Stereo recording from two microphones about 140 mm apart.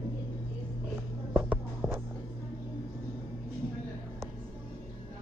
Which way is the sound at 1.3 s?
10° right (ahead or behind).